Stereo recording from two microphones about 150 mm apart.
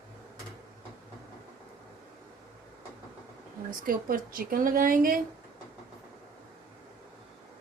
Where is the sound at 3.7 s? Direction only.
65° right (ahead or behind).